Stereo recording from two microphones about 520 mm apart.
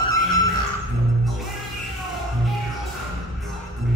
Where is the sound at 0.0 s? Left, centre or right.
Left.